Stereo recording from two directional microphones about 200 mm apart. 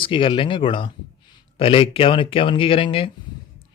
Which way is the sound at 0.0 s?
25° left (ahead or behind).